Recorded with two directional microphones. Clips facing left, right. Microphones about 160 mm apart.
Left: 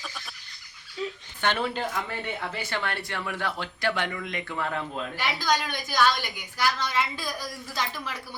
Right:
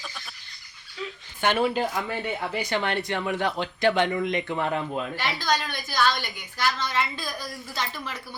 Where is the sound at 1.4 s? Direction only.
10° right (ahead or behind).